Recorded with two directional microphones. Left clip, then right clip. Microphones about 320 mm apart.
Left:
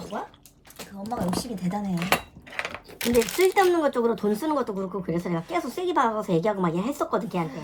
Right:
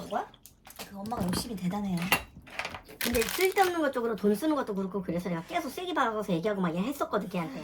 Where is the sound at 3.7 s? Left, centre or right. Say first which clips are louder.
Left 7 dB; left.